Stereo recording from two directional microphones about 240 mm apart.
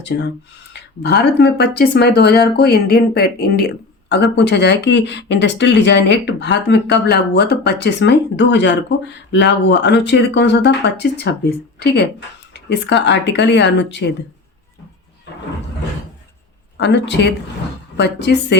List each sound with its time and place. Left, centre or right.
0.0 s speech: left
16.7 s speech: left